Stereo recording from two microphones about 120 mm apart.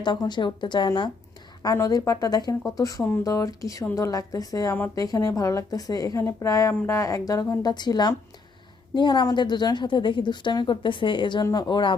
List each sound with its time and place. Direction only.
0.0 s a woman's voice: 40° left (ahead or behind)
1.6 s a woman's voice: 30° left (ahead or behind)